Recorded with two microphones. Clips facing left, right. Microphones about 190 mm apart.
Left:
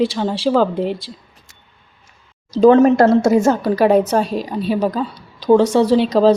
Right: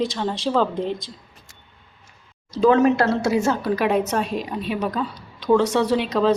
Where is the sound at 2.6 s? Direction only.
45° left (ahead or behind).